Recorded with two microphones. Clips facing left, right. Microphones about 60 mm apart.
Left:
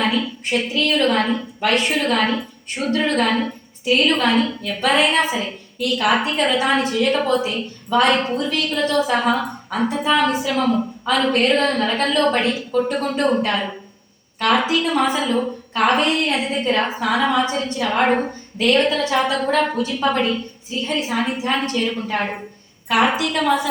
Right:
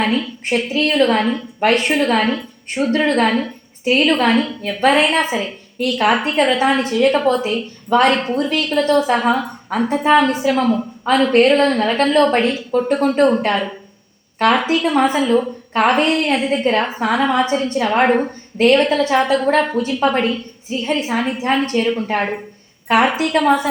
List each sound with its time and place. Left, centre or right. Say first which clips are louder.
0.4 s a woman's voice: right 4 dB; right
4.1 s a woman's voice: right 2 dB; right
14.3 s a woman's voice: right 3 dB; right